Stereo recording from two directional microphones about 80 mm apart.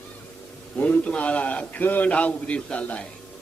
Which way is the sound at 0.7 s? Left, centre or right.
Centre.